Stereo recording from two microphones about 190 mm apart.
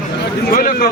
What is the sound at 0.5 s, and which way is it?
Speech, 50° left (ahead or behind).